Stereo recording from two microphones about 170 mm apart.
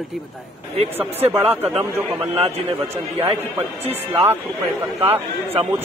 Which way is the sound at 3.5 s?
10° right (ahead or behind).